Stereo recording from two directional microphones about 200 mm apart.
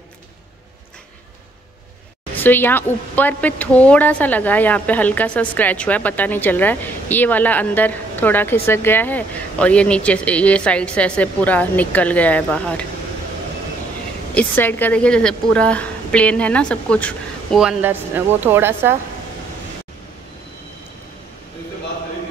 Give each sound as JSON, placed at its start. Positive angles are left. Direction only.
{"t": 2.3, "sound": "speech", "side_deg": 10}
{"t": 14.3, "sound": "a woman's voice", "side_deg": 10}